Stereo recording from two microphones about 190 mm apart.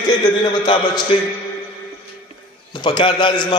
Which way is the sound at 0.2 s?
25° left (ahead or behind).